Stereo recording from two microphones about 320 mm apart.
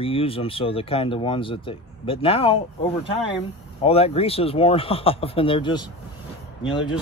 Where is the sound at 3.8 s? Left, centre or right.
Centre.